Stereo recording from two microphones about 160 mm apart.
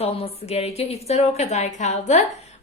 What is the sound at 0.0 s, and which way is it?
A woman's voice, 40° left (ahead or behind).